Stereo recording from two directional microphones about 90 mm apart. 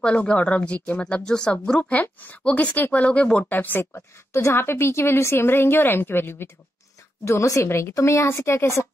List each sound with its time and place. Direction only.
0.0 s speech: 15° left (ahead or behind)
3.9 s a woman's voice: 30° left (ahead or behind)